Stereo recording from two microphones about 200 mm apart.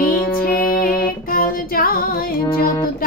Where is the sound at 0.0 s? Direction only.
45° left (ahead or behind).